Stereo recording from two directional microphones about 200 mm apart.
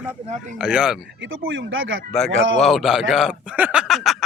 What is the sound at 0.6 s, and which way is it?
Speech, 5° right (ahead or behind).